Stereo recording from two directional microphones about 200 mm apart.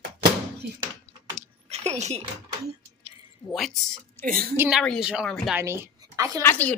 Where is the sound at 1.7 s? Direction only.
35° right (ahead or behind).